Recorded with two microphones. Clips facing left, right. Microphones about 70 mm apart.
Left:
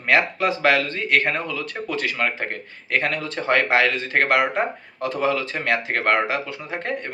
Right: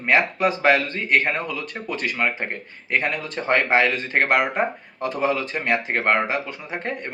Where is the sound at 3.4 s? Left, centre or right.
Right.